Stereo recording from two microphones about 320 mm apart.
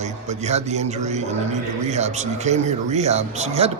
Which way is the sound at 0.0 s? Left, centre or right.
Right.